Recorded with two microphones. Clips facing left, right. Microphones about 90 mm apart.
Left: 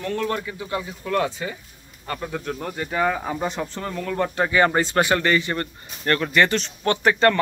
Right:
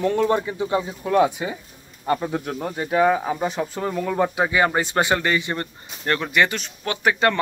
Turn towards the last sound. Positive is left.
turn(degrees=-10)  # may be behind; listen again after turning